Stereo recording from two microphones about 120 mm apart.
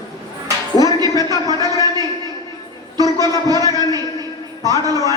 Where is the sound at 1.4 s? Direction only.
30° right (ahead or behind).